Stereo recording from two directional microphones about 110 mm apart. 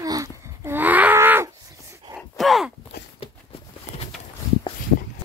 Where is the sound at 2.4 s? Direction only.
Centre (ahead or behind).